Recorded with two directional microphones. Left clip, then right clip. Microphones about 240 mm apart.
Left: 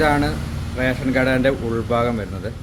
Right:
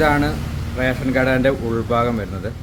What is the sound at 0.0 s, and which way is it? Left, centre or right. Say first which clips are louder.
A man's voice: right 1 dB; centre.